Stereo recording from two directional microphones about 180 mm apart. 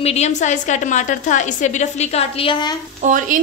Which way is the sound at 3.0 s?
45° right (ahead or behind).